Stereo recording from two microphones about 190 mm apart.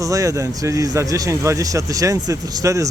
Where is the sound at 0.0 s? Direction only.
15° right (ahead or behind).